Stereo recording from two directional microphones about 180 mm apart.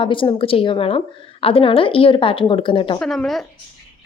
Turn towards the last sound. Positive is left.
turn(degrees=0)  # may be behind; listen again after turning